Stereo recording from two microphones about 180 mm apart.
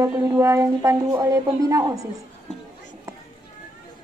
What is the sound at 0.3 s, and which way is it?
Speech, 15° right (ahead or behind).